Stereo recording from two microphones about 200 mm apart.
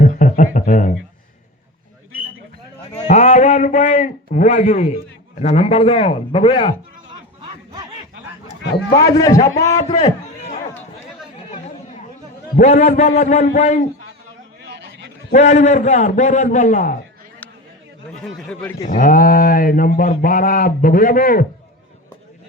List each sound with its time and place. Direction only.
0.0 s a sound: 40° left (ahead or behind)
3.1 s a man's voice: 35° left (ahead or behind)
8.9 s a man's voice: 15° left (ahead or behind)
9.7 s a sound: 35° left (ahead or behind)
12.5 s a man's voice: 35° left (ahead or behind)
14.6 s a sound: 60° right (ahead or behind)
15.3 s a man's voice: 35° left (ahead or behind)
18.3 s a man's voice: 5° left (ahead or behind)
18.9 s a man's voice: 40° left (ahead or behind)